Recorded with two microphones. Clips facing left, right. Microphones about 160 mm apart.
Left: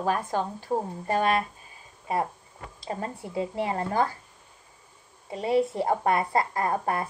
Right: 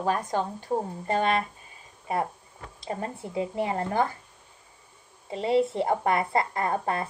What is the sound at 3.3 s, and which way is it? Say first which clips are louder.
Speech: even; 20° right (ahead or behind).